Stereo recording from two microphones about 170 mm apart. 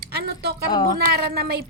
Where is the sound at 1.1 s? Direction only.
65° right (ahead or behind).